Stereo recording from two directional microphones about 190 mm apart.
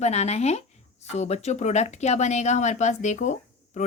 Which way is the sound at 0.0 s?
35° left (ahead or behind).